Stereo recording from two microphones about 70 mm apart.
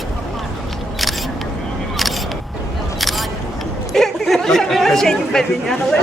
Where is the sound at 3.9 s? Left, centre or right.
Centre.